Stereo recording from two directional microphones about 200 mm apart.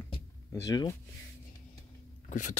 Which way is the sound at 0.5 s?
15° left (ahead or behind).